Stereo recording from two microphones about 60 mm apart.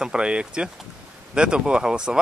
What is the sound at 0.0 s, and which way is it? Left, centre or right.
Speech, centre.